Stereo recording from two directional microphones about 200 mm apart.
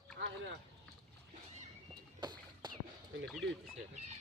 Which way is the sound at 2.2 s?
20° right (ahead or behind).